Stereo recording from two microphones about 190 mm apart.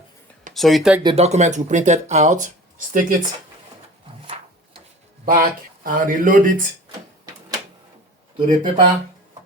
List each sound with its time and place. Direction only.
0.5 s speech: centre (ahead or behind)
1.0 s speech: 35° right (ahead or behind)
5.2 s speech: 45° right (ahead or behind)
8.4 s speech: 45° right (ahead or behind)